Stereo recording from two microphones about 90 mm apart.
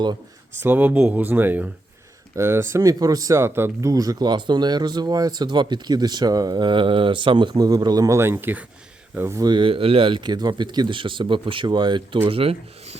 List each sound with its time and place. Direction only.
0.6 s speech: 20° right (ahead or behind); by 7.5 s 65° right (ahead or behind)
7.5 s speech: 45° right (ahead or behind); by 9.4 s 25° right (ahead or behind)
9.4 s speech: 60° right (ahead or behind); by 12.5 s 90° right